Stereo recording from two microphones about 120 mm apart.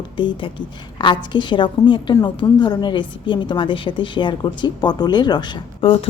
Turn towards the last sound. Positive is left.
turn(degrees=50)  # may be behind; listen again after turning